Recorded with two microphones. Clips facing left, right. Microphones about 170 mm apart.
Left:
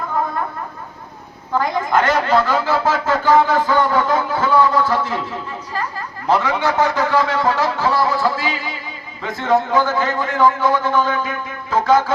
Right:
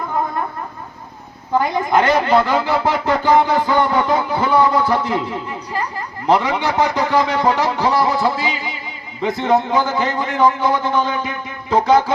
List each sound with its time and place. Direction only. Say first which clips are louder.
1.5 s speech: right 2 dB; 15° right (ahead or behind)